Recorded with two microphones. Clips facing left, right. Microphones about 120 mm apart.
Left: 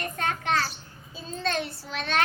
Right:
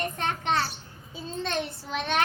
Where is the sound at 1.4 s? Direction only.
20° right (ahead or behind).